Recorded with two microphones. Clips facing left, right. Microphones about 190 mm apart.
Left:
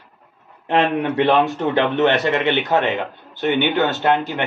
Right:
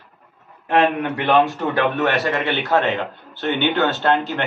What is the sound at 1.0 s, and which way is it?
Speech, centre (ahead or behind).